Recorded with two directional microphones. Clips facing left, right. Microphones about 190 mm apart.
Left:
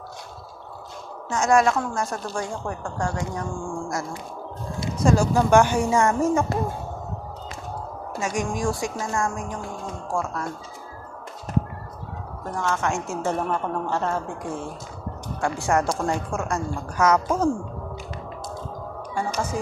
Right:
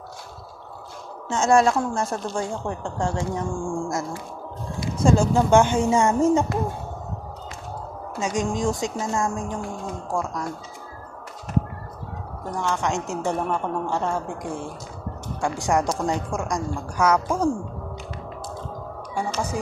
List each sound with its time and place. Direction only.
1.3 s a woman's voice: 25° right (ahead or behind)
5.0 s a woman's voice: 25° right (ahead or behind)
8.2 s a woman's voice: 20° right (ahead or behind)
12.5 s a woman's voice: 15° right (ahead or behind)